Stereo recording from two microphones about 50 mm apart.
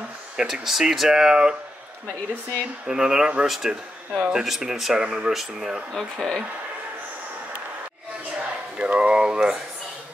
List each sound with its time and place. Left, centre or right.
0.4 s speech: centre
2.9 s speech: centre
3.4 s speech: centre
5.0 s speech: right
5.3 s speech: centre
5.9 s speech: centre
8.4 s a sound: centre
8.9 s speech: right